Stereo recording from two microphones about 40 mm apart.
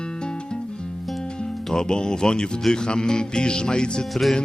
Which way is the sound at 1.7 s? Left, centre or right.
Centre.